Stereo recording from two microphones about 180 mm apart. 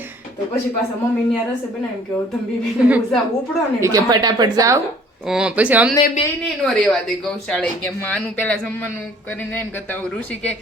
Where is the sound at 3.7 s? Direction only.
20° right (ahead or behind).